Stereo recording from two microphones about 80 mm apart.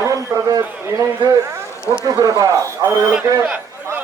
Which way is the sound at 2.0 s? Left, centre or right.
Right.